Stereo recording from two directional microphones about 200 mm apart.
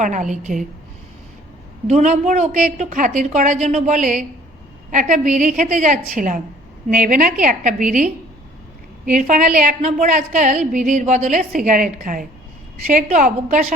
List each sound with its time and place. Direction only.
0.0 s a woman's voice: 40° right (ahead or behind)
1.9 s a woman's voice: 35° right (ahead or behind)